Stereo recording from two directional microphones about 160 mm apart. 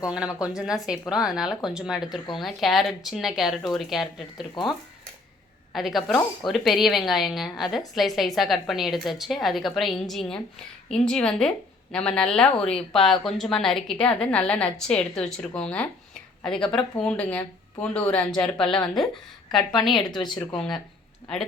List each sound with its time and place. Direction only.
0.0 s a woman's voice: 5° right (ahead or behind)
5.7 s a woman's voice: centre (ahead or behind)
20.1 s speech: 30° left (ahead or behind)